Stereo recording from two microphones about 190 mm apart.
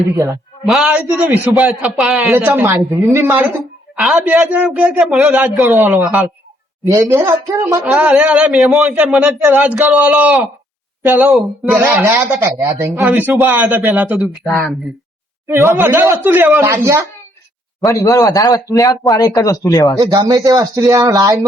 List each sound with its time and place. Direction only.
0.6 s speech: centre (ahead or behind)
6.8 s a man's voice: 15° right (ahead or behind); by 14.7 s centre (ahead or behind)
15.4 s speech: 15° right (ahead or behind)
17.8 s a man's voice: 15° left (ahead or behind)
20.0 s speech: 20° right (ahead or behind)